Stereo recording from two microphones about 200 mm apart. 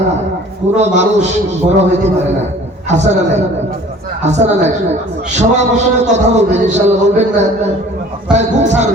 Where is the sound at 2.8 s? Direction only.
35° right (ahead or behind).